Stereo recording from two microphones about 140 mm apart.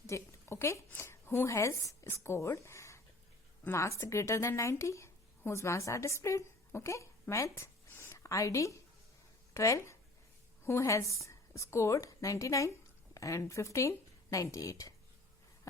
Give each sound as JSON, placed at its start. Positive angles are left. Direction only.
{"t": 0.1, "sound": "a woman's voice", "side_deg": 20}